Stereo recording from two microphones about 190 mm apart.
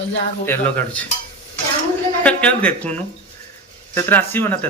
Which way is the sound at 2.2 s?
5° left (ahead or behind).